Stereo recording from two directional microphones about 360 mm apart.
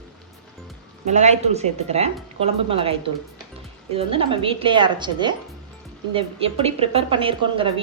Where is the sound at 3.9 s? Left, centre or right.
Centre.